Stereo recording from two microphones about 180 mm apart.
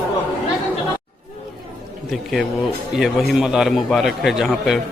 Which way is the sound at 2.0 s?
Centre (ahead or behind).